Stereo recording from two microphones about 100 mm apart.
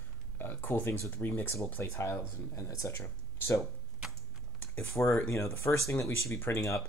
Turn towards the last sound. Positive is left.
turn(degrees=30)  # may be behind; listen again after turning